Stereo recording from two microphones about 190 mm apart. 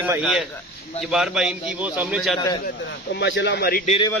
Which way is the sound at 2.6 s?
60° left (ahead or behind).